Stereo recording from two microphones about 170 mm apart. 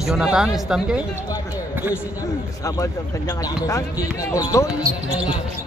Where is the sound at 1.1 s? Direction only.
20° left (ahead or behind).